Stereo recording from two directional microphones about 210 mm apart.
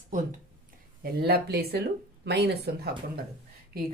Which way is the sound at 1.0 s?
45° right (ahead or behind).